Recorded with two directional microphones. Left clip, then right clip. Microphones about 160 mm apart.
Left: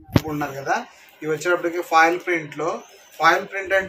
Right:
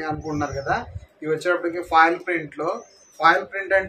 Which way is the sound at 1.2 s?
15° right (ahead or behind).